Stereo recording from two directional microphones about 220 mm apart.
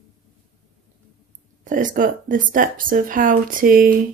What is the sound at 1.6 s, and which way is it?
Speech, 35° right (ahead or behind).